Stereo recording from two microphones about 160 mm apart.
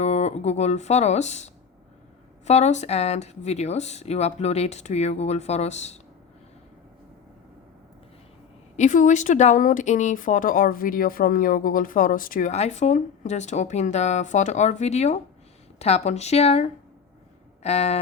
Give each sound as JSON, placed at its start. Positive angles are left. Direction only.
{"t": 0.0, "sound": "speech", "side_deg": 45}
{"t": 8.7, "sound": "speech", "side_deg": 50}